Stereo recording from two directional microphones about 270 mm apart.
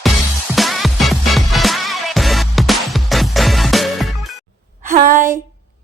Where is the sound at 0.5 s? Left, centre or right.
Centre.